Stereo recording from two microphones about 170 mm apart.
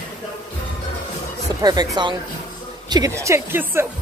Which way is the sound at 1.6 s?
25° right (ahead or behind).